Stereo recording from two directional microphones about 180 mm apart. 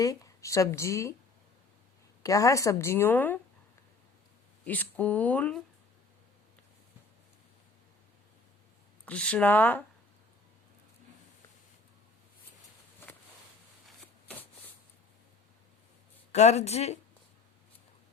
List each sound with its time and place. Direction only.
0.0 s speech: 20° left (ahead or behind)
2.2 s speech: 20° left (ahead or behind)
4.6 s speech: 10° left (ahead or behind)
9.0 s speech: 5° left (ahead or behind)
13.0 s a sound: 15° left (ahead or behind)
16.3 s speech: 40° left (ahead or behind)